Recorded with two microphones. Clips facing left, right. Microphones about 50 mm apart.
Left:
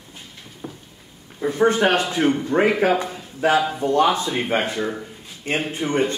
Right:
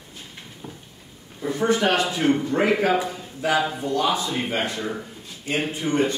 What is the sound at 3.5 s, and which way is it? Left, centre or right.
Speech, centre.